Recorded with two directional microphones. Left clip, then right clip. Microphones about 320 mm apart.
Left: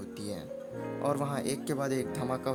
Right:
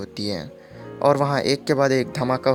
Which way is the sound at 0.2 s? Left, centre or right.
Left.